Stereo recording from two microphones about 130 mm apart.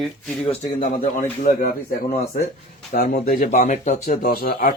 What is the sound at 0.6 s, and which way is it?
A man's voice, 80° left.